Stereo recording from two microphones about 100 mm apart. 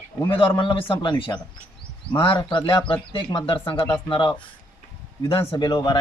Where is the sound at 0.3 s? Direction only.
60° left (ahead or behind).